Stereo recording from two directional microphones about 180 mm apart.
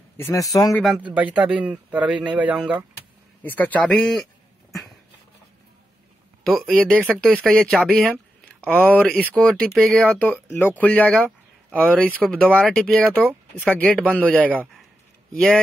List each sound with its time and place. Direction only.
0.2 s speech: 15° left (ahead or behind)
0.7 s a man's voice: 5° right (ahead or behind)
3.4 s a man's voice: 10° left (ahead or behind)
6.4 s a man's voice: centre (ahead or behind)